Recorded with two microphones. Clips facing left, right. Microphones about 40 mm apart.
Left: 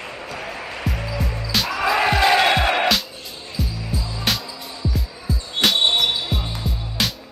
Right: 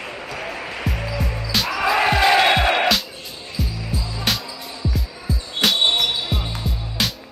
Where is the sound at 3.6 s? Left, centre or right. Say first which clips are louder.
Even; centre.